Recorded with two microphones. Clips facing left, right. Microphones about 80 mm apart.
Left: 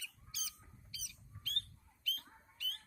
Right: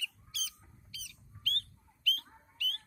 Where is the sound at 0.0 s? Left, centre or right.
Left.